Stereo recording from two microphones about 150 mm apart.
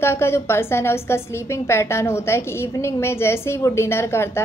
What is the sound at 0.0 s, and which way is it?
A woman's voice, 15° left (ahead or behind).